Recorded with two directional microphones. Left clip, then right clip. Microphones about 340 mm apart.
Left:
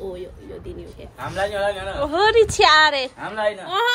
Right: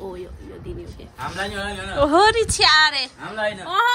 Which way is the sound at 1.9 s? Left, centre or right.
Right.